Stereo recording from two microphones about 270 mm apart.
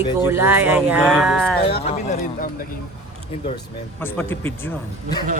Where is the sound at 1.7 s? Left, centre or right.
Left.